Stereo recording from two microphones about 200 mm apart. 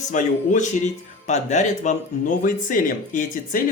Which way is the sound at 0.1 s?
35° left (ahead or behind).